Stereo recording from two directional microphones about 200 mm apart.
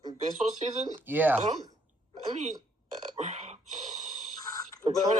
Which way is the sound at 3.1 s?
35° right (ahead or behind).